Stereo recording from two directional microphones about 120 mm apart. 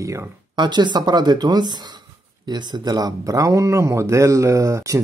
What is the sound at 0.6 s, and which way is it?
Speech, 40° right (ahead or behind).